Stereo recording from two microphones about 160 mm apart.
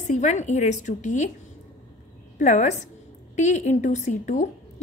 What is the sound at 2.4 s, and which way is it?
A woman's voice, 50° left (ahead or behind).